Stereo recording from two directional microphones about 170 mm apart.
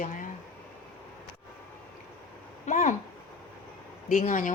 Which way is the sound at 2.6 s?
45° left (ahead or behind).